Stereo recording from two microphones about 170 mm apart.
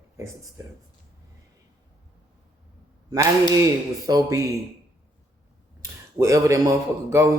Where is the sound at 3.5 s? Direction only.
20° right (ahead or behind).